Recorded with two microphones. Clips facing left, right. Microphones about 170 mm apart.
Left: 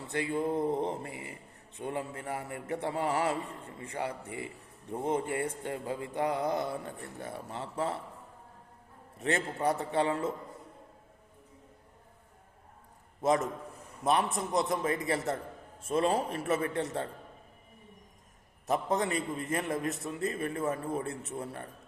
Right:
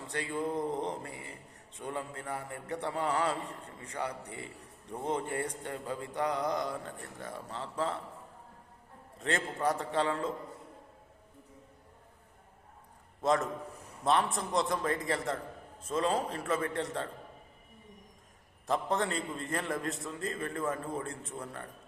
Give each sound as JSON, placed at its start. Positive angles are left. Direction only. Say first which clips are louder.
{"t": 0.1, "sound": "mantra", "louder": "left 3 dB", "side_deg": 20}
{"t": 9.1, "sound": "mantra", "louder": "left 2 dB", "side_deg": 20}
{"t": 14.0, "sound": "a man's voice", "louder": "even", "side_deg": 0}
{"t": 14.5, "sound": "mantra", "louder": "left 1 dB", "side_deg": 20}
{"t": 19.0, "sound": "mantra", "louder": "left 3 dB", "side_deg": 20}